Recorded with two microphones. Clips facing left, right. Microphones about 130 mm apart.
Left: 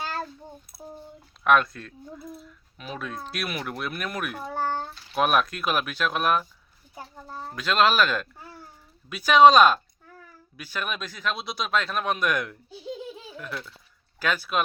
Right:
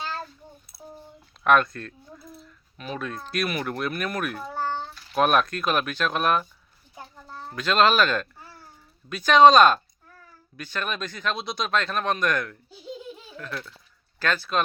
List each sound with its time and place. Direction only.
1.5 s a child's voice: 5° left (ahead or behind)